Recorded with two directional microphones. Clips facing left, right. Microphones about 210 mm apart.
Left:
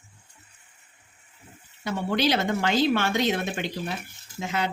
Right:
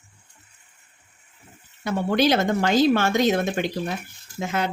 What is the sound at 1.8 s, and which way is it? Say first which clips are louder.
A woman's voice: right 4 dB; 50° right (ahead or behind).